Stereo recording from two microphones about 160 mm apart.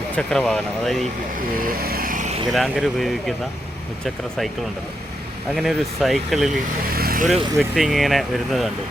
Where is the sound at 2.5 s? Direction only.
Centre (ahead or behind).